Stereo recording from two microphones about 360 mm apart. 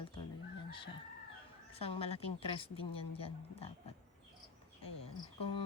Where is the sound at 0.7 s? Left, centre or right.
Centre.